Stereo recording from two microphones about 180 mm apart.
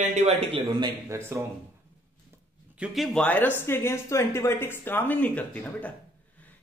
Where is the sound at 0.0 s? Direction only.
40° right (ahead or behind).